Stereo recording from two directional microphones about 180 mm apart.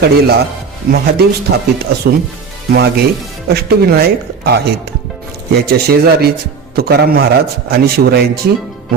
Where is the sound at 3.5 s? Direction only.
60° right (ahead or behind).